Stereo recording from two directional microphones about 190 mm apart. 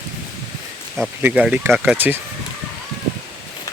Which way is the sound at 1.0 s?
5° right (ahead or behind).